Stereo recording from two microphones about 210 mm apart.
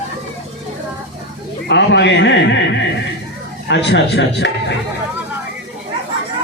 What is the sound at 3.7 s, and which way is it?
Speech, 55° left (ahead or behind).